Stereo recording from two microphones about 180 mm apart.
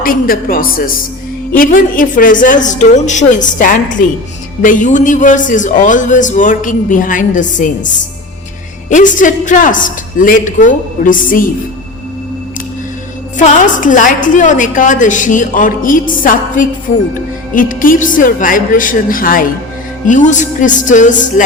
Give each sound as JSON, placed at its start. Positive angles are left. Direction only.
{"t": 0.0, "sound": "a man's voice", "side_deg": 50}
{"t": 13.3, "sound": "a man's voice", "side_deg": 45}